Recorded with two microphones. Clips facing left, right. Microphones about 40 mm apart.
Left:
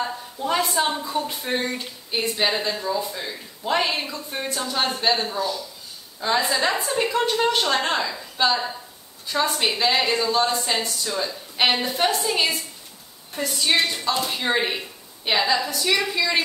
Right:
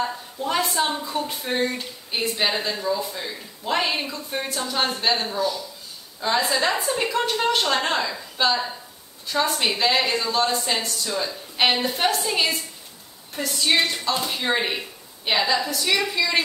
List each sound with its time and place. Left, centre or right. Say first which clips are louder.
0.0 s a woman's voice: even; centre